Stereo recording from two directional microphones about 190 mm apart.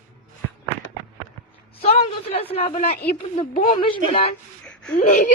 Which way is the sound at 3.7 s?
30° left (ahead or behind).